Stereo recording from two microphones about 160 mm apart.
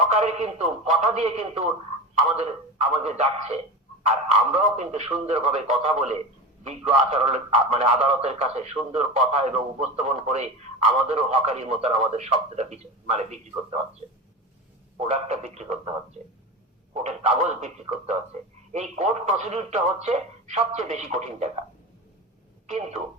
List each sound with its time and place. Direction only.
0.1 s a man's voice: 45° right (ahead or behind)
14.9 s a man's voice: 45° right (ahead or behind)
16.9 s a man's voice: 45° right (ahead or behind)
22.6 s speech: 45° right (ahead or behind)